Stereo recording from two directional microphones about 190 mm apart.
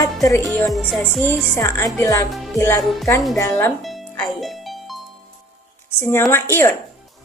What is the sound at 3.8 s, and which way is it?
Music, centre (ahead or behind).